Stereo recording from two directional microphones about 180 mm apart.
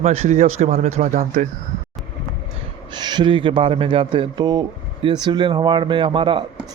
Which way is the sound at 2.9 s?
25° right (ahead or behind).